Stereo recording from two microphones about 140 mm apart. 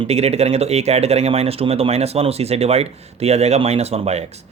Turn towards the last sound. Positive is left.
turn(degrees=-50)  # may be behind; listen again after turning